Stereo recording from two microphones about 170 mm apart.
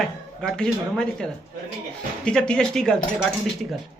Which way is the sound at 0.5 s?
5° left (ahead or behind).